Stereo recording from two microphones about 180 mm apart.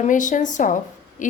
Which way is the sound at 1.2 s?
45° left (ahead or behind).